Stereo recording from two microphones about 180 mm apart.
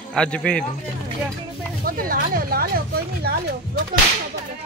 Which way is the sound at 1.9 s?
55° right (ahead or behind).